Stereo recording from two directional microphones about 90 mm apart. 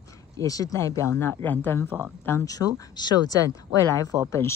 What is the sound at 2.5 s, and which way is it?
Speech, 45° left (ahead or behind).